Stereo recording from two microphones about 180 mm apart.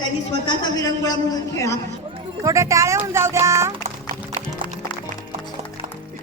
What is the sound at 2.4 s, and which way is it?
Speech, 15° right (ahead or behind).